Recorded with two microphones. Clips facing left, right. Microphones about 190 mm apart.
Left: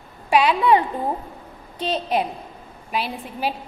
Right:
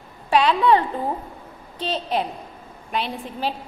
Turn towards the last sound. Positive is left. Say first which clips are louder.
# even
turn(degrees=10)  # may be behind; listen again after turning